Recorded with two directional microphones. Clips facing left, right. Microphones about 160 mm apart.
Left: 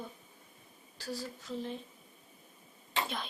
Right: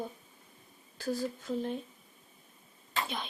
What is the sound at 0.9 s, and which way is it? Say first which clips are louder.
Speech: right 7 dB; 50° right (ahead or behind).